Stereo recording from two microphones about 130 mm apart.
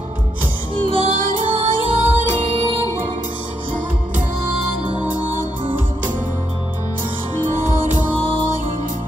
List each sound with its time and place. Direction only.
0.7 s music: 45° right (ahead or behind)
4.8 s music: 35° left (ahead or behind)